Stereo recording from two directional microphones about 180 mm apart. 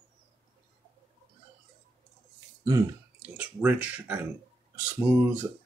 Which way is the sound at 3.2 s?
10° right (ahead or behind).